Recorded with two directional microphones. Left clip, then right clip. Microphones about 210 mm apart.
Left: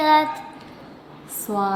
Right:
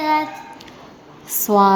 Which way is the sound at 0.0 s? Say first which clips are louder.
Left 2 dB; 30° left (ahead or behind).